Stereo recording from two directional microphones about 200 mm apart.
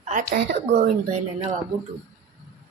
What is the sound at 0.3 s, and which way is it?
Speech, 55° right (ahead or behind).